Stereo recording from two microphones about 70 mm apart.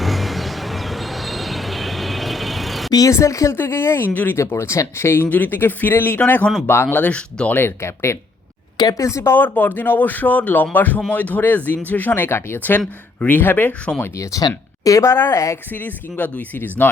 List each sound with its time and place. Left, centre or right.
0.0 s vehicle: centre
3.1 s speech: left
3.5 s speech: left
4.1 s speech: left
4.4 s speech: left
5.3 s speech: left
7.6 s speech: left
9.3 s speech: left
14.8 s speech: left
15.1 s speech: left
15.7 s speech: left